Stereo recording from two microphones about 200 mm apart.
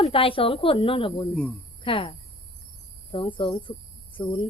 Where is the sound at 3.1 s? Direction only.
25° left (ahead or behind).